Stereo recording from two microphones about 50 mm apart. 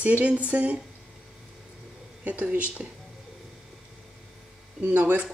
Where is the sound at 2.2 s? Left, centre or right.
Right.